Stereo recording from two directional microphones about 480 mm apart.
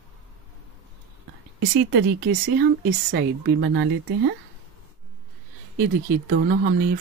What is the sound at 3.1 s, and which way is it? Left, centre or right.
Speech, centre.